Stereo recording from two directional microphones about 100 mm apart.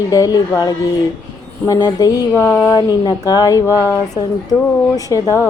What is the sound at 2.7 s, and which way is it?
Speech, 40° left (ahead or behind).